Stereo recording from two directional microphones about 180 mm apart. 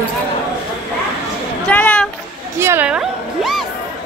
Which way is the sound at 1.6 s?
5° left (ahead or behind).